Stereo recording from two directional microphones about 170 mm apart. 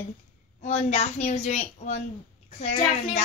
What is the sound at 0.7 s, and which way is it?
A woman's voice, 40° left (ahead or behind).